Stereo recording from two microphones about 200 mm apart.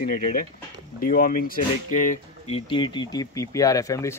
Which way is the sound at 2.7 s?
25° left (ahead or behind).